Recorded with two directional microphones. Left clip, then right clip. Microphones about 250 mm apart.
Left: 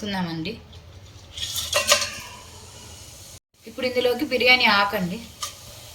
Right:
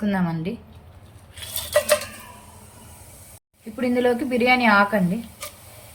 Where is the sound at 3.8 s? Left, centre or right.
Centre.